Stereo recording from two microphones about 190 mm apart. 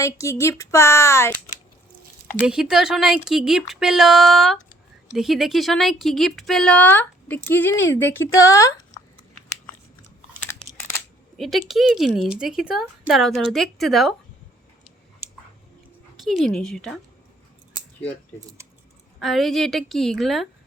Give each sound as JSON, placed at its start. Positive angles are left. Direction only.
{"t": 0.0, "sound": "speech", "side_deg": 15}
{"t": 2.5, "sound": "speech", "side_deg": -5}
{"t": 11.3, "sound": "speech", "side_deg": 0}
{"t": 16.1, "sound": "speech", "side_deg": 0}
{"t": 19.2, "sound": "speech", "side_deg": 0}